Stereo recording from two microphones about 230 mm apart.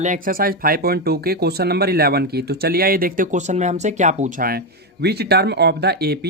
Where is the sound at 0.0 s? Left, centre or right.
Right.